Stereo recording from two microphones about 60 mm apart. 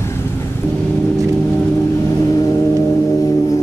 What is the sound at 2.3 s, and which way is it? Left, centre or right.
Vehicle, left.